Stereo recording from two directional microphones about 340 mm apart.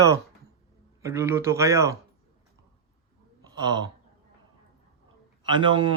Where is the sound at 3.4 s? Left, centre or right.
Centre.